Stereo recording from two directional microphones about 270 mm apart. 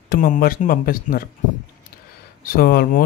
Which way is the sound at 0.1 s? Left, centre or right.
Left.